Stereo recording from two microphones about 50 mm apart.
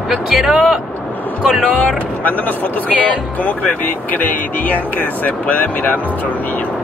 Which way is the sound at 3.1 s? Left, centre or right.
Left.